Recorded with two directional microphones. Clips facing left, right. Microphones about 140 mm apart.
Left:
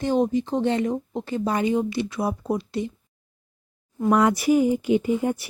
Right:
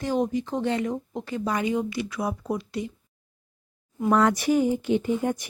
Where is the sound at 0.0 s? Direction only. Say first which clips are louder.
Left 4 dB; 25° left (ahead or behind).